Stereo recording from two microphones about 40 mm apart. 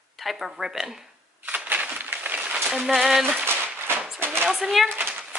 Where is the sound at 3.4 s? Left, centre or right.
Right.